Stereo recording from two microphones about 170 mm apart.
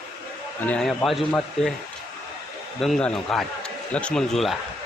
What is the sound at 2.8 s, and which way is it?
A man's voice, 5° left (ahead or behind).